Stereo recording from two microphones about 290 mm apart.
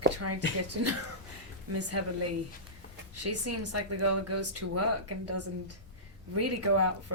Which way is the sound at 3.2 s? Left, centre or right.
Right.